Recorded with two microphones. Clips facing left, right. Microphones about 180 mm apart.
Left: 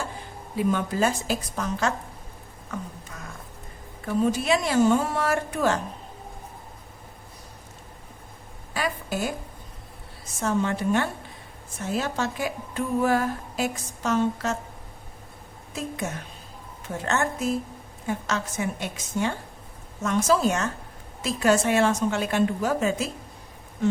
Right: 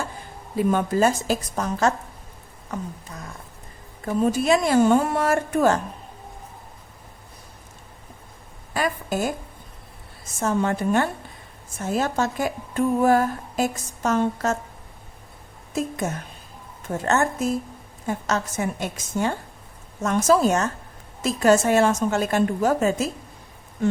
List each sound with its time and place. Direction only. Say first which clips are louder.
0.7 s a woman's voice: right 5 dB; 45° right (ahead or behind)
4.0 s a woman's voice: right 3 dB; 45° right (ahead or behind)
8.7 s a sound: right 4 dB; 45° right (ahead or behind)
10.4 s a woman's voice: right 2 dB; 50° right (ahead or behind)
16.0 s a woman's voice: right 4 dB; 45° right (ahead or behind)